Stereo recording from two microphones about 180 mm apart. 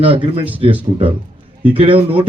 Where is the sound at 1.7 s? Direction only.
30° right (ahead or behind).